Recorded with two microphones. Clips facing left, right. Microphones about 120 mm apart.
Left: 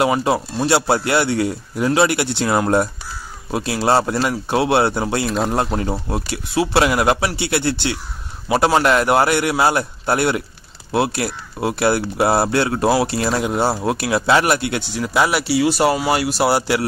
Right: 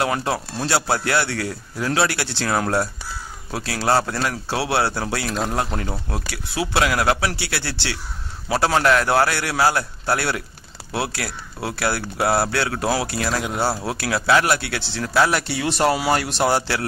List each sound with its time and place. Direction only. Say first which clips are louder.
0.0 s speech: left 5 dB; 15° left (ahead or behind)
5.2 s speech: left 5 dB; centre (ahead or behind)
5.8 s speech: left 6 dB; 25° left (ahead or behind)